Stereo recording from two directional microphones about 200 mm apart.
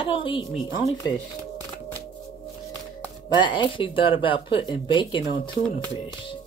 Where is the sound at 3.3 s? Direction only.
25° left (ahead or behind).